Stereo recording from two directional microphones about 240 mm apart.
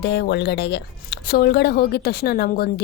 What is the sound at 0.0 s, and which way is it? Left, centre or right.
Speech, left.